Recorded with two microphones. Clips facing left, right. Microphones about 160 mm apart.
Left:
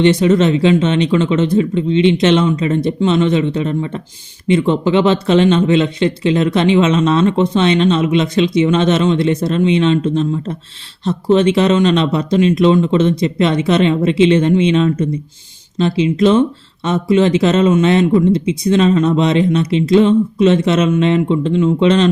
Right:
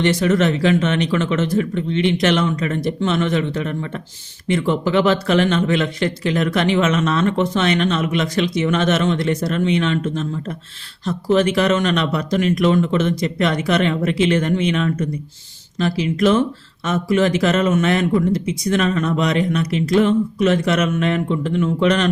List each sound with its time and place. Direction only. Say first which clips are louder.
0.0 s speech: left 5 dB; 20° left (ahead or behind)